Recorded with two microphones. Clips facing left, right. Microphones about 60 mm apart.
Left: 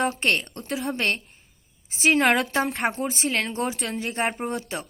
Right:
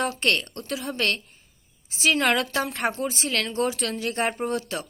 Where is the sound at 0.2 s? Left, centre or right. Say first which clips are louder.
Even; left.